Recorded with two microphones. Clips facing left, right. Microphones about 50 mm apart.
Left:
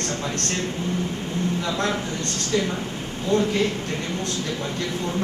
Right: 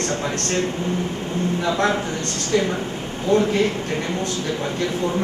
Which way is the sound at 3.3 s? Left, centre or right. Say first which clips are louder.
Right 3 dB; right.